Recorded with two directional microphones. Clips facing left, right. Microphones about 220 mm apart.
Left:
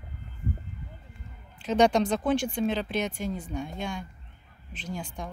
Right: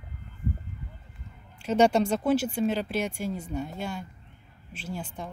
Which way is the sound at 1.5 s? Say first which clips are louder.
Right 1 dB; 10° right (ahead or behind).